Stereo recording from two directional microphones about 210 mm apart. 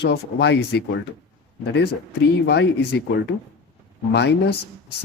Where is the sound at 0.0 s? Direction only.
55° left (ahead or behind).